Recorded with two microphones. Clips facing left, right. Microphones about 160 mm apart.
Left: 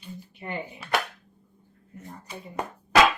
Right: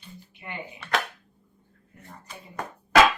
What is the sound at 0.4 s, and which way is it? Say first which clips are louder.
Speech: left 5 dB; 40° left (ahead or behind).